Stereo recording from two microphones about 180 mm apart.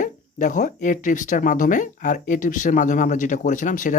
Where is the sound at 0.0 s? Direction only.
45° left (ahead or behind).